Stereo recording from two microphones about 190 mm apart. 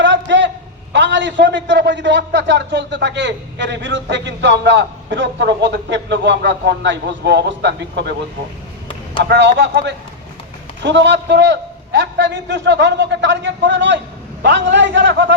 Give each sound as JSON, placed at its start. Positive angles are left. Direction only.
{"t": 0.0, "sound": "a sound", "side_deg": -70}
{"t": 0.9, "sound": "a man's voice", "side_deg": -70}
{"t": 9.3, "sound": "a man's voice", "side_deg": -65}